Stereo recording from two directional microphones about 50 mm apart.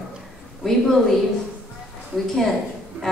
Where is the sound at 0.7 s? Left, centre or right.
Centre.